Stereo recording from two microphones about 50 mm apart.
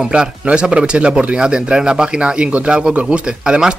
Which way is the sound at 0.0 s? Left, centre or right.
Centre.